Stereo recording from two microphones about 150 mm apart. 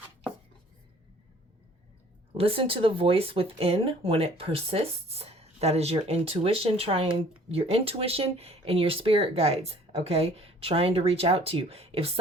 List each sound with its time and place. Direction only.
2.3 s speech: 40° right (ahead or behind)